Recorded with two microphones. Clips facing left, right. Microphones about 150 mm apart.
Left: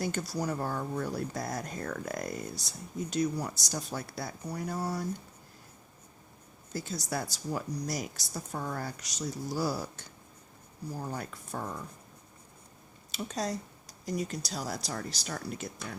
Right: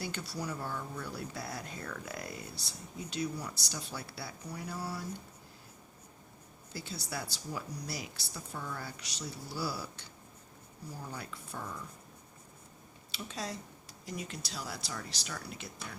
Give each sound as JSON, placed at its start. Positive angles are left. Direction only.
{"t": 0.0, "sound": "speech", "side_deg": 45}
{"t": 6.7, "sound": "speech", "side_deg": 45}
{"t": 13.1, "sound": "speech", "side_deg": 40}